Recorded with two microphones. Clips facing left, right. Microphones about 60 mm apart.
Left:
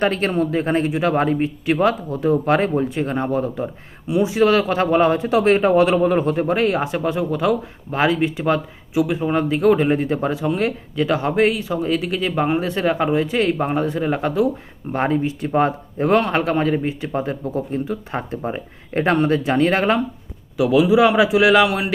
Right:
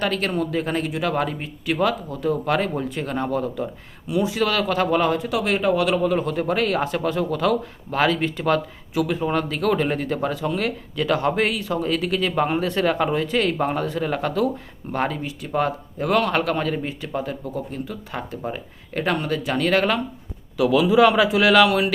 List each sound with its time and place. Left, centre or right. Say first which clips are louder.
0.0 s speech: left 4 dB; left